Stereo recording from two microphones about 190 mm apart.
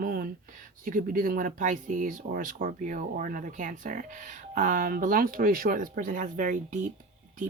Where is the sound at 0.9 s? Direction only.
45° right (ahead or behind).